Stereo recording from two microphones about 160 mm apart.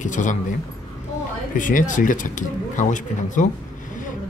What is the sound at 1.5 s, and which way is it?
Speech, 55° left (ahead or behind).